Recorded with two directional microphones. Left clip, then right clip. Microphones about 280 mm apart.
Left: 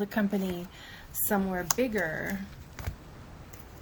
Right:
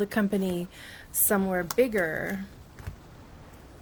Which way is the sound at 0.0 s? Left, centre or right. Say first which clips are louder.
Right 3 dB; right.